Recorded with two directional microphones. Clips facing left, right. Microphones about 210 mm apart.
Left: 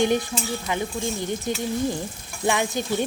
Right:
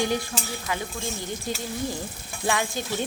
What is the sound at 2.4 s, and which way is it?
Speech, 20° left (ahead or behind).